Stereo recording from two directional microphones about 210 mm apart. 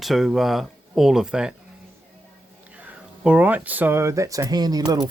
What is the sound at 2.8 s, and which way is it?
Speech, 10° right (ahead or behind).